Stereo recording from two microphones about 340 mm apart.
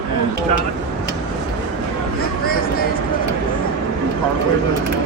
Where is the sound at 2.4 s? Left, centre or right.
Left.